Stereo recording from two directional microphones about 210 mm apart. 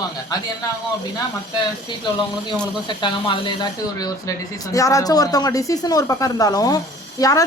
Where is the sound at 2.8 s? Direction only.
20° left (ahead or behind).